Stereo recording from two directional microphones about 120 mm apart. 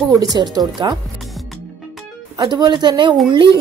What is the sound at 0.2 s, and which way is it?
Speech, 35° right (ahead or behind).